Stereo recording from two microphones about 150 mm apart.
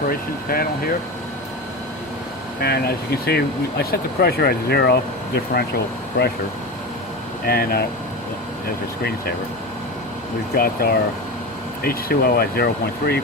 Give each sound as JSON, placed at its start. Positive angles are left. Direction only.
{"t": 0.1, "sound": "speech", "side_deg": 75}
{"t": 2.6, "sound": "speech", "side_deg": 90}
{"t": 6.2, "sound": "speech", "side_deg": 80}
{"t": 7.4, "sound": "speech", "side_deg": 90}
{"t": 10.5, "sound": "speech", "side_deg": 85}